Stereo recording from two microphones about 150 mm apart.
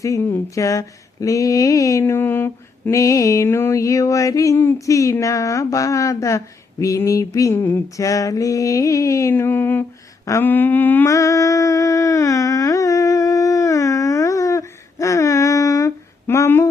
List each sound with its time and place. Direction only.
0.0 s speech: 20° left (ahead or behind)
10.2 s humming: 15° left (ahead or behind)